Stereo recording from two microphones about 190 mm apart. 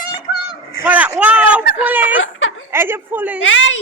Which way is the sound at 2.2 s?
90° left.